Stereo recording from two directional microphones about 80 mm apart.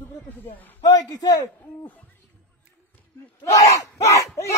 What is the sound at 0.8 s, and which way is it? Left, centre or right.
Speech, left.